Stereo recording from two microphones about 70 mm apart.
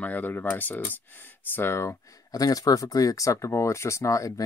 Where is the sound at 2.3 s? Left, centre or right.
Left.